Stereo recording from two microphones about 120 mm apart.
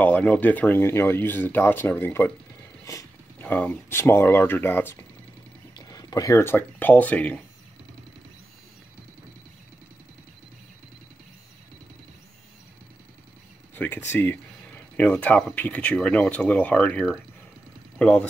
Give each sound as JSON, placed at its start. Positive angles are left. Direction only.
{"t": 0.0, "sound": "speech", "side_deg": 10}
{"t": 2.8, "sound": "a sound", "side_deg": 25}
{"t": 3.4, "sound": "speech", "side_deg": 10}
{"t": 5.8, "sound": "speech", "side_deg": 30}
{"t": 13.7, "sound": "speech", "side_deg": 15}